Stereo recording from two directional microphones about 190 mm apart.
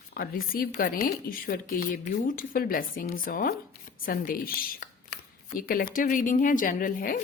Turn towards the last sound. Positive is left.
turn(degrees=45)  # may be behind; listen again after turning